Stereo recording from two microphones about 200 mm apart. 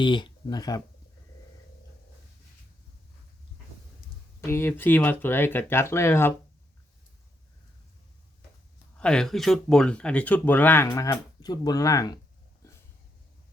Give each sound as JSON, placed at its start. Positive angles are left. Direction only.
{"t": 0.0, "sound": "speech", "side_deg": 25}
{"t": 4.4, "sound": "speech", "side_deg": 10}
{"t": 9.0, "sound": "speech", "side_deg": 5}
{"t": 12.6, "sound": "a sound", "side_deg": 15}